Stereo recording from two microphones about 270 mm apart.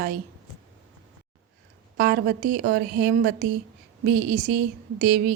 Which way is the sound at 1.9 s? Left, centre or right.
Right.